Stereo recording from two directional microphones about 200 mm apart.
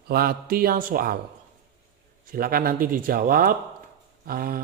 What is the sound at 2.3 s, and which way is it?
Speech, 45° right (ahead or behind).